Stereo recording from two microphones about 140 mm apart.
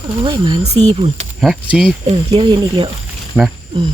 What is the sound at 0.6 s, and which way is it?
Speech, 50° right (ahead or behind).